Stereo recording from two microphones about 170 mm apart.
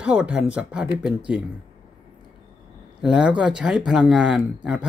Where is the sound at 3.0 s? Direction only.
5° right (ahead or behind).